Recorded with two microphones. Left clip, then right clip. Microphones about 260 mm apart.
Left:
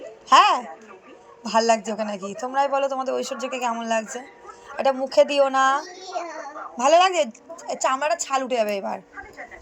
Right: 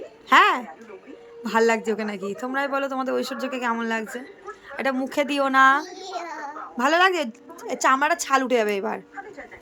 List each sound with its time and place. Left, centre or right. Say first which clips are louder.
0.3 s a child's voice: left 1 dB; centre